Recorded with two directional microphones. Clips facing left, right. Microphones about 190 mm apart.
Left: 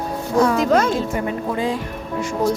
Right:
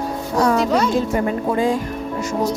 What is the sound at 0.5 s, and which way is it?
Speech, 50° left (ahead or behind).